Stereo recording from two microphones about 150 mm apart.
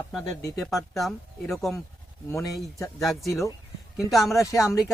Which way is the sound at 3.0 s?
Centre (ahead or behind).